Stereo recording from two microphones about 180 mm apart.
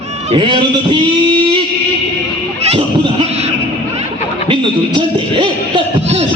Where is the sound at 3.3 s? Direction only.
35° right (ahead or behind).